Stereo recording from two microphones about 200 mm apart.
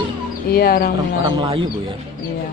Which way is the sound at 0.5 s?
50° left (ahead or behind).